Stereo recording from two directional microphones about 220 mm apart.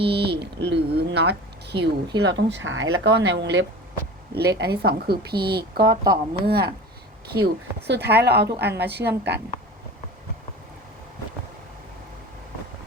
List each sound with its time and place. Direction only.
0.1 s speech: 50° right (ahead or behind)